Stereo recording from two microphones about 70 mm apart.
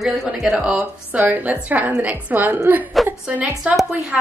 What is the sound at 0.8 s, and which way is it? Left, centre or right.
A woman's voice, right.